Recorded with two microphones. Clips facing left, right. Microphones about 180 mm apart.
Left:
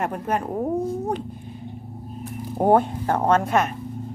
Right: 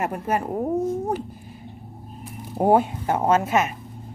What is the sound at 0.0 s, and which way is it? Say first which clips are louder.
Speech: even; 5° right (ahead or behind).